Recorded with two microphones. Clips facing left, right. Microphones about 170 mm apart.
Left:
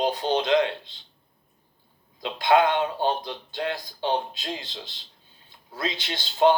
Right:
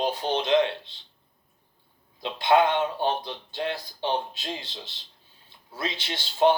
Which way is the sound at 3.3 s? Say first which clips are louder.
Left 1 dB; 20° right (ahead or behind).